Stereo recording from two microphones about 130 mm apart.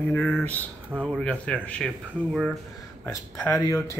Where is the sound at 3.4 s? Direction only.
20° left (ahead or behind).